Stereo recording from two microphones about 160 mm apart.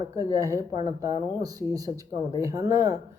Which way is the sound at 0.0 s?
20° right (ahead or behind).